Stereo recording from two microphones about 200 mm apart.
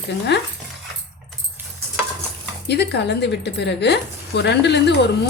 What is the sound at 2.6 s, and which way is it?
Speech, 55° left (ahead or behind).